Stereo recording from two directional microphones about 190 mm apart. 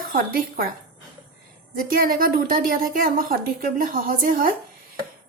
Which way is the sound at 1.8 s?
50° right (ahead or behind).